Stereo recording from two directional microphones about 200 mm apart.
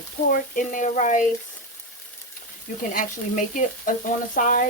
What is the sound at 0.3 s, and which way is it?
Frying, 40° left (ahead or behind).